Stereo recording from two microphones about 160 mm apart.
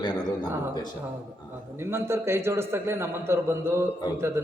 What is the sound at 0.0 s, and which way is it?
Speech, 25° left (ahead or behind).